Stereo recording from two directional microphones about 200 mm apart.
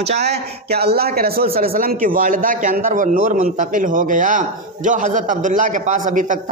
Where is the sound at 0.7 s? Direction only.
50° right (ahead or behind).